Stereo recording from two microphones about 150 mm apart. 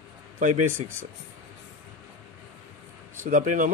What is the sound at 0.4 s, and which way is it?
Speech, 55° right (ahead or behind).